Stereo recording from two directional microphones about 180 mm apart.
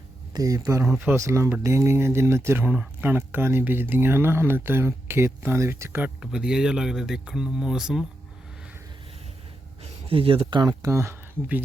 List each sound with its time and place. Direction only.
0.3 s speech: 20° right (ahead or behind); by 8.0 s 5° right (ahead or behind)
10.1 s speech: 30° right (ahead or behind); by 11.6 s 10° right (ahead or behind)